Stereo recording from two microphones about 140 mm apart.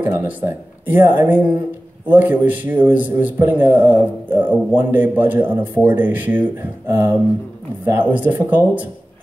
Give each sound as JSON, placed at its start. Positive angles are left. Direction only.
{"t": 0.0, "sound": "a man's voice", "side_deg": -15}